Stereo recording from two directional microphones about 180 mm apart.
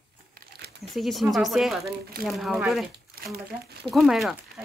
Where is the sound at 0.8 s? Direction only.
Centre (ahead or behind).